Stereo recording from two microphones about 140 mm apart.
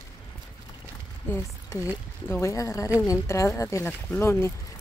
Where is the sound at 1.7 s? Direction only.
25° left (ahead or behind).